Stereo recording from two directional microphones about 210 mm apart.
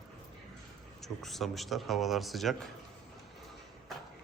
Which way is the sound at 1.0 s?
Centre (ahead or behind).